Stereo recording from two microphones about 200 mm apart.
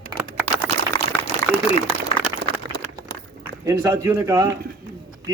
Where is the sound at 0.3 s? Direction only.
10° right (ahead or behind).